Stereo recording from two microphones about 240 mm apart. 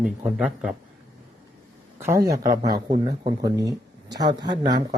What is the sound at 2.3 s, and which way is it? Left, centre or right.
Speech, centre.